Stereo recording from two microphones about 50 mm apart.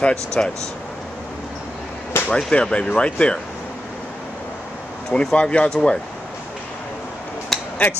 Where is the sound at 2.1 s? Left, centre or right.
Left.